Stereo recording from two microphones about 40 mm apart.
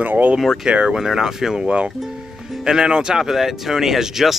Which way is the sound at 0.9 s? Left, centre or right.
Centre.